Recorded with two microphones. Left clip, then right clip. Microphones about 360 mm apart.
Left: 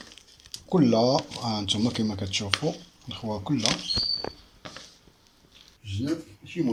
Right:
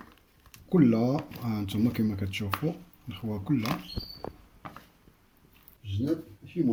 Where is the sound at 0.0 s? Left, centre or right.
Left.